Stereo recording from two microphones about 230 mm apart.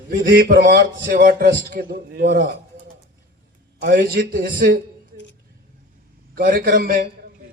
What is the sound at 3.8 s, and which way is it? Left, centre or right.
Speech, right.